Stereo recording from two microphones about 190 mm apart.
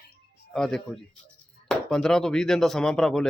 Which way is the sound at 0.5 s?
5° left (ahead or behind).